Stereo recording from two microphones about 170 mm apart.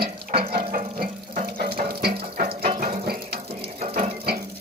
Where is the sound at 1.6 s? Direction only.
65° right (ahead or behind).